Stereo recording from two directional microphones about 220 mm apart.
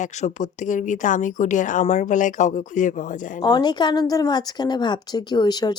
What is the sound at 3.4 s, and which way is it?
A woman's voice, 20° left (ahead or behind).